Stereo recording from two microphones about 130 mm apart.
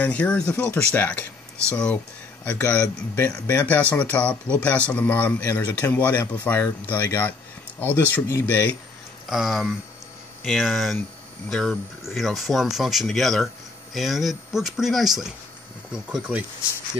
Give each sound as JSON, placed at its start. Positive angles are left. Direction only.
{"t": 0.0, "sound": "speech", "side_deg": 10}
{"t": 9.3, "sound": "speech", "side_deg": 0}